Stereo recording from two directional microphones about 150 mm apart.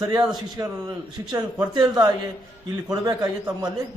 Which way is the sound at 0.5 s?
30° right (ahead or behind).